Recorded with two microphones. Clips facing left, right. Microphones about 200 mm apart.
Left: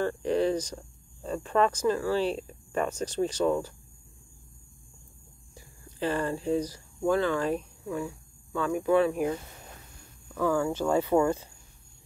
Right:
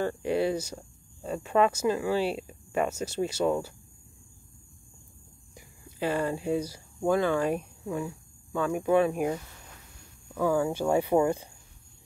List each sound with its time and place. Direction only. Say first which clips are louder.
0.0 s speech: left 1 dB; 10° right (ahead or behind)
5.5 s speech: even; 10° right (ahead or behind)